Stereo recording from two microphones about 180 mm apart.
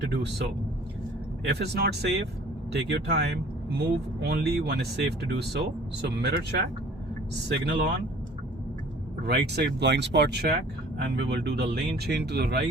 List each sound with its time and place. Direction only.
0.1 s speech: 65° right (ahead or behind)
9.2 s speech: 65° right (ahead or behind)